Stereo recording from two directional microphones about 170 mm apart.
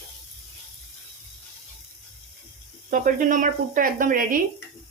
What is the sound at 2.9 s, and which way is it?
Speech, 50° right (ahead or behind).